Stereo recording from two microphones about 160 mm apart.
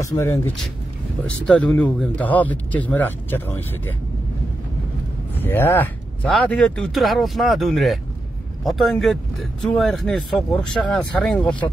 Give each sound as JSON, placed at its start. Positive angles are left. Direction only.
{"t": 0.0, "sound": "speech", "side_deg": 20}
{"t": 1.2, "sound": "speech", "side_deg": 10}
{"t": 5.3, "sound": "speech", "side_deg": 10}